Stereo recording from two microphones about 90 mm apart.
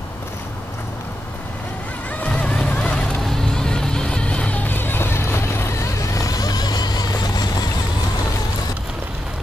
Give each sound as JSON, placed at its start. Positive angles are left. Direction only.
{"t": 2.2, "sound": "music", "side_deg": 15}